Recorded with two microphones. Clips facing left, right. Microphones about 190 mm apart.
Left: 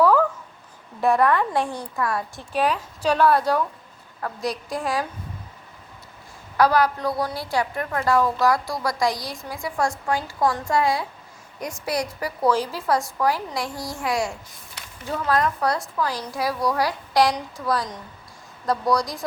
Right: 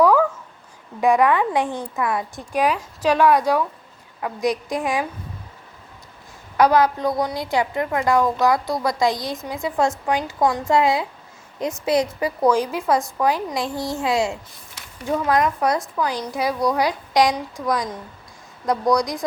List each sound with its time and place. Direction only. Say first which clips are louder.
0.0 s a sound: right 2 dB; 10° right (ahead or behind)
1.0 s a woman's voice: right 2 dB; 15° right (ahead or behind)
6.6 s a woman's voice: right 3 dB; 20° right (ahead or behind)
18.6 s a woman's voice: right 3 dB; 20° right (ahead or behind)